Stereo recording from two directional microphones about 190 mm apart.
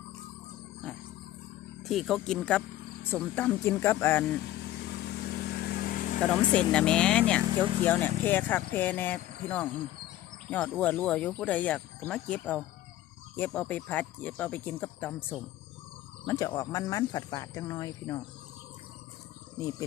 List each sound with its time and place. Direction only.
1.8 s speech: centre (ahead or behind)
4.4 s vehicle: 65° left (ahead or behind); by 6.1 s 45° left (ahead or behind)
6.5 s speech: 5° left (ahead or behind)
7.4 s speech: 25° right (ahead or behind)
7.9 s speech: 10° left (ahead or behind)
16.2 s speech: 15° left (ahead or behind)